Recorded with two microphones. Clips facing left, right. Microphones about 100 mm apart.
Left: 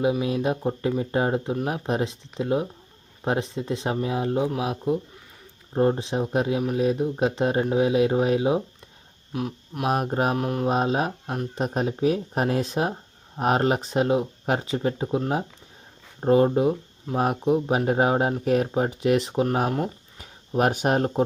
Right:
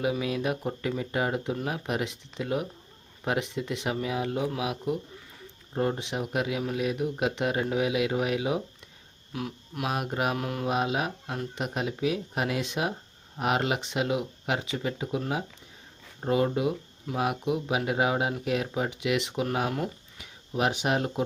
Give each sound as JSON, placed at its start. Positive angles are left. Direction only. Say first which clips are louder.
{"t": 0.0, "sound": "speech", "louder": "left 5 dB", "side_deg": 25}
{"t": 9.9, "sound": "speech", "louder": "left 6 dB", "side_deg": 35}
{"t": 10.3, "sound": "speech", "louder": "left 5 dB", "side_deg": 25}
{"t": 10.8, "sound": "speech", "louder": "left 4 dB", "side_deg": 35}